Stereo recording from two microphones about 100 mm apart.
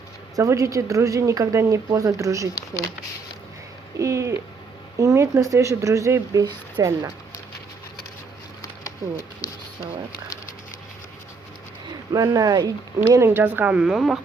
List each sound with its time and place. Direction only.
0.3 s speech: 30° right (ahead or behind)
3.9 s a sound: 30° right (ahead or behind)
4.9 s speech: 30° right (ahead or behind)
6.4 s speech: 50° right (ahead or behind)
8.8 s speech: 35° left (ahead or behind)
11.9 s speech: 40° right (ahead or behind)
13.0 s speech: 25° right (ahead or behind); by 14.2 s 5° right (ahead or behind)